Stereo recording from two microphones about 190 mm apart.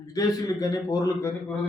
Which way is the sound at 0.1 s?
20° left (ahead or behind).